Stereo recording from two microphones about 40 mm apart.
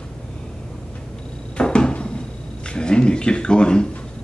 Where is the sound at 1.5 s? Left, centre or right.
Left.